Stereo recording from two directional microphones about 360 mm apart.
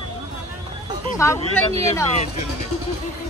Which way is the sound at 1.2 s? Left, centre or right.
Centre.